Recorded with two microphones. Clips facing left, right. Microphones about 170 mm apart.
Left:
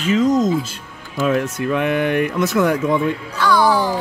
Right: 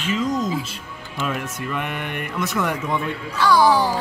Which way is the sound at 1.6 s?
90° left.